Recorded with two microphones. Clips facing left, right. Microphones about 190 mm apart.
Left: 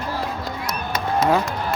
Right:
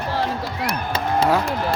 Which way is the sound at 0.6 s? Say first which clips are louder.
Right 3 dB; 30° right (ahead or behind).